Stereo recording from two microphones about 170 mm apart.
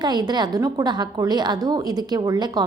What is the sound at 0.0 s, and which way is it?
A woman's voice, 25° right (ahead or behind).